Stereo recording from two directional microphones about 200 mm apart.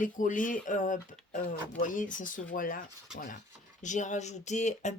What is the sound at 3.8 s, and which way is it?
Speech, 35° left (ahead or behind).